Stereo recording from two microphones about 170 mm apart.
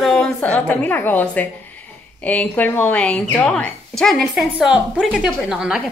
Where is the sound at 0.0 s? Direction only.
5° left (ahead or behind).